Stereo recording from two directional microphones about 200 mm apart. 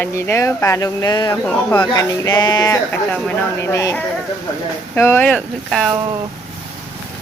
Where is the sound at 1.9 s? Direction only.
20° left (ahead or behind); by 6.0 s centre (ahead or behind).